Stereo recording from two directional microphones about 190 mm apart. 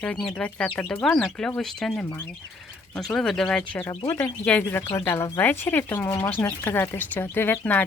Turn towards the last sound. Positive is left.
turn(degrees=10)  # may be behind; listen again after turning